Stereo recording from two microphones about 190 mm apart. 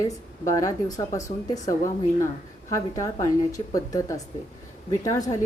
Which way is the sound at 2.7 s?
15° left (ahead or behind).